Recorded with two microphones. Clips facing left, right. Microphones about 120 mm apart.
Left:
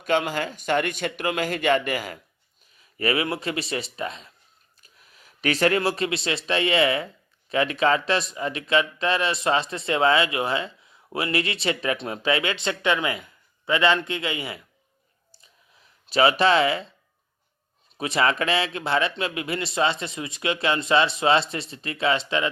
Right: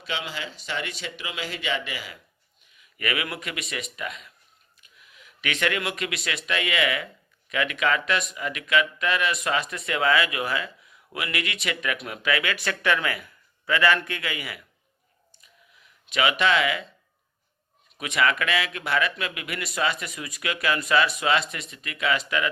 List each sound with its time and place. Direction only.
0.0 s a man's voice: 50° left (ahead or behind)
2.6 s speech: 35° left (ahead or behind)
15.3 s a sound: 30° left (ahead or behind)
17.9 s speech: 30° left (ahead or behind)